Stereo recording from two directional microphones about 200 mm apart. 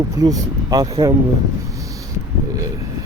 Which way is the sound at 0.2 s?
20° right (ahead or behind).